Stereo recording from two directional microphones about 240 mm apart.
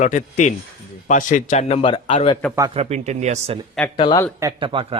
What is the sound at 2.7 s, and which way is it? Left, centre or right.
Speech, right.